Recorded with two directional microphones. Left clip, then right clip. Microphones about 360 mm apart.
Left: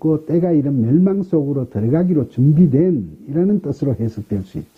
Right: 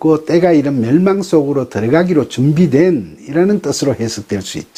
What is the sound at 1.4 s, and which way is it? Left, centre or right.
Speech, centre.